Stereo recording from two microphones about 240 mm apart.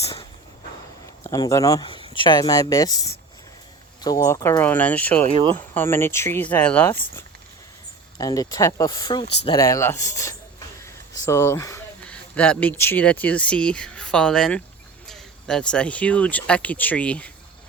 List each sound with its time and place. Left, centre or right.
0.0 s a sound: centre
1.2 s speech: centre
5.2 s speech: right
5.5 s speech: centre